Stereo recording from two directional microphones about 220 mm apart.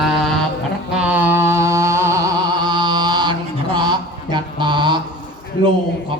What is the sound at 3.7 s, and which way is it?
Mantra, 20° right (ahead or behind).